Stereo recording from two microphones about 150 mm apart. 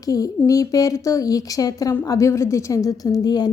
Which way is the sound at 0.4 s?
25° left (ahead or behind).